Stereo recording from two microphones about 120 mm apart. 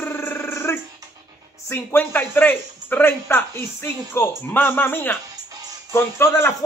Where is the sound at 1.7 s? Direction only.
20° left (ahead or behind).